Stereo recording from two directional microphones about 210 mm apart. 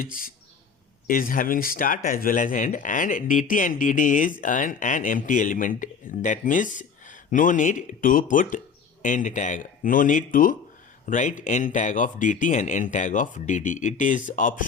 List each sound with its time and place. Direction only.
0.0 s speech: 40° left (ahead or behind)